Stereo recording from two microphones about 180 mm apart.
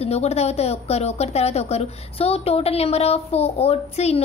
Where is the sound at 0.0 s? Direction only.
35° left (ahead or behind).